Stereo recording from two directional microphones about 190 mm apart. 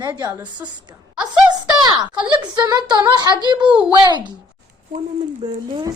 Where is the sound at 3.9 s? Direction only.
20° right (ahead or behind).